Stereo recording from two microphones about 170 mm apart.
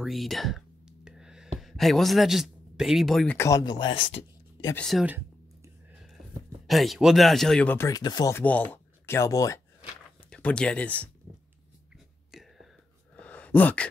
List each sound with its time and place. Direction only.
0.0 s a sound: centre (ahead or behind)
3.3 s speech: 20° left (ahead or behind)
4.7 s speech: centre (ahead or behind)
6.7 s speech: centre (ahead or behind); by 9.6 s 20° left (ahead or behind)
10.3 s speech: 5° left (ahead or behind)
12.3 s whispering: centre (ahead or behind)
13.2 s a sound: 10° left (ahead or behind)